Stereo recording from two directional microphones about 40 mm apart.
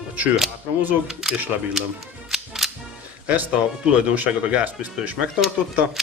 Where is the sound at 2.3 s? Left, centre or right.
Centre.